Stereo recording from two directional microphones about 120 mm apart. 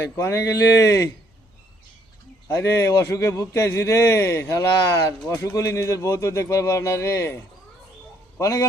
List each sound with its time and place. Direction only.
0.2 s a man's voice: 25° left (ahead or behind)
2.5 s a man's voice: 20° left (ahead or behind)
8.4 s a man's voice: 25° left (ahead or behind)